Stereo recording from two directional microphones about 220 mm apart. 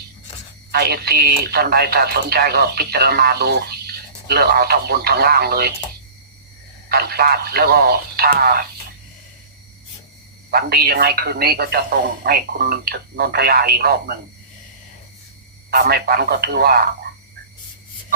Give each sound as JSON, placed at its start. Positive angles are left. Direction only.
{"t": 0.7, "sound": "speech", "side_deg": -45}
{"t": 6.8, "sound": "speech", "side_deg": -45}
{"t": 10.5, "sound": "speech", "side_deg": -45}
{"t": 15.7, "sound": "speech", "side_deg": -45}